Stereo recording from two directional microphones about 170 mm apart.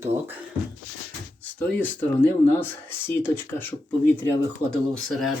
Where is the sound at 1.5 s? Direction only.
10° left (ahead or behind).